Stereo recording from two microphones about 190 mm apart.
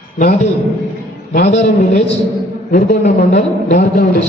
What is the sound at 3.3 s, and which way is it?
Speech, 40° left (ahead or behind).